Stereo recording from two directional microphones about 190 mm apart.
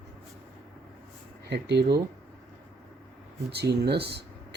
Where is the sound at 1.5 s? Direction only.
60° right (ahead or behind).